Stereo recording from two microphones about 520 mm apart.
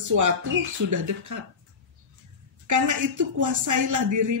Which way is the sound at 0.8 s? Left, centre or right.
Right.